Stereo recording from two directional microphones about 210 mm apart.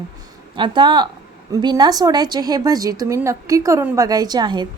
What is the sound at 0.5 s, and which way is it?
A woman's voice, 20° right (ahead or behind).